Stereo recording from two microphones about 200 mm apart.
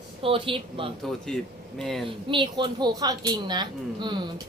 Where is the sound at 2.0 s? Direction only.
25° right (ahead or behind).